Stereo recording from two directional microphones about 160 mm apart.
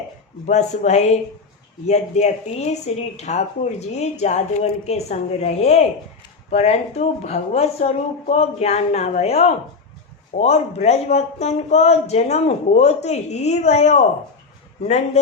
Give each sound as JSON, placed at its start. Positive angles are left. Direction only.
{"t": 0.4, "sound": "speech", "side_deg": 50}